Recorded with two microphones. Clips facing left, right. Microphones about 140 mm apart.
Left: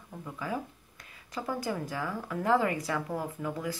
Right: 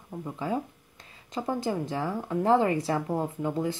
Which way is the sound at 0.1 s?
25° right (ahead or behind).